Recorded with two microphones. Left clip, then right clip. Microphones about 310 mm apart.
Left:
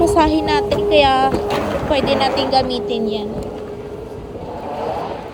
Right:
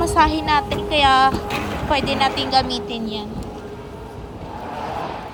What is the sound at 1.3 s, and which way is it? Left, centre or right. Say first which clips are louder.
Speech: left 6 dB; right.